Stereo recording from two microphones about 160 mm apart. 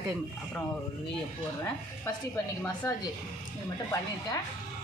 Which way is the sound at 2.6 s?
25° left (ahead or behind).